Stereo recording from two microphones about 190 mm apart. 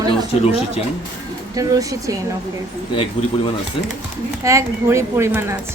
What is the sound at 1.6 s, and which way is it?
Speech, 20° right (ahead or behind).